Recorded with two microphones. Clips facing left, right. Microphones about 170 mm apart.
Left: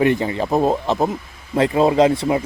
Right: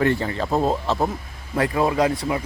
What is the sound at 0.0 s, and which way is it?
Speech, 15° left (ahead or behind).